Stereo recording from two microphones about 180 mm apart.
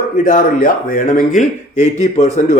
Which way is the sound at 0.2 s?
50° left (ahead or behind).